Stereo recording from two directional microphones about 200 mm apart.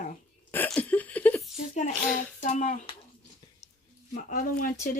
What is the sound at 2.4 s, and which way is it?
Speech, 35° left (ahead or behind).